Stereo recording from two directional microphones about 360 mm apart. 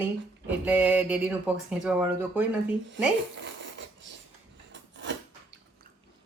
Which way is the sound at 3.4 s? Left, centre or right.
Right.